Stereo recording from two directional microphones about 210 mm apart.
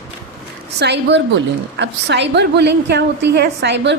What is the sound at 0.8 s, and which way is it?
A woman's voice, 55° right (ahead or behind).